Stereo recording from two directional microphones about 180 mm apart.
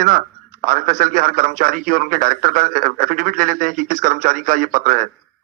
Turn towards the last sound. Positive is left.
turn(degrees=-50)  # may be behind; listen again after turning